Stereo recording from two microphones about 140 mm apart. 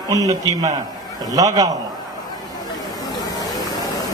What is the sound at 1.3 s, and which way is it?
Speech, 25° right (ahead or behind).